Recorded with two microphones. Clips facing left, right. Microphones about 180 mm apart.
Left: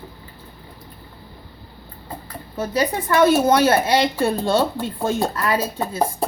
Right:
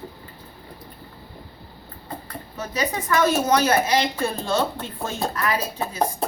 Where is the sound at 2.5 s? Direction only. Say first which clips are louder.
Left 5 dB; 30° left (ahead or behind).